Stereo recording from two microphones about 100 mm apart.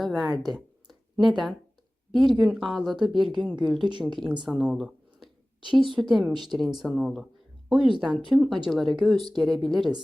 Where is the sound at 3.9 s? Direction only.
50° right (ahead or behind).